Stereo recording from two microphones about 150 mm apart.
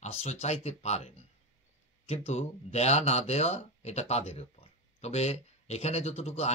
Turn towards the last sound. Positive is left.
turn(degrees=45)  # may be behind; listen again after turning